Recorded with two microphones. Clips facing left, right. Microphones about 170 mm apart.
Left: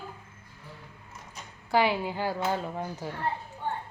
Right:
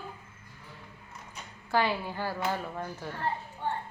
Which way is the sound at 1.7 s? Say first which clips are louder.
Left 3 dB; 15° left (ahead or behind).